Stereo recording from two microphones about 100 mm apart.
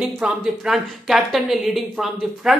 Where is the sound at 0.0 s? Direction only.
5° right (ahead or behind).